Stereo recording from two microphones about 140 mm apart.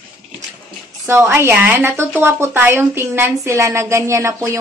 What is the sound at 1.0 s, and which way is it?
A woman's voice, 15° right (ahead or behind).